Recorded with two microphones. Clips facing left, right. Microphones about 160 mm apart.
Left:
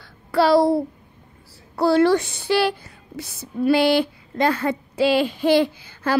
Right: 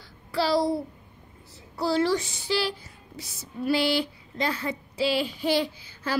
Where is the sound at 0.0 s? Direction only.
60° left (ahead or behind).